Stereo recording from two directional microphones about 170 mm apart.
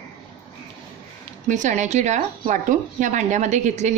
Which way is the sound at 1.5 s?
45° right (ahead or behind).